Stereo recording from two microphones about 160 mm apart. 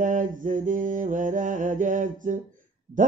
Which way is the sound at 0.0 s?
55° right (ahead or behind).